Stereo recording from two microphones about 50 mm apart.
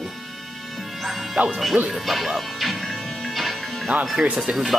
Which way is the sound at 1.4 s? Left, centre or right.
Right.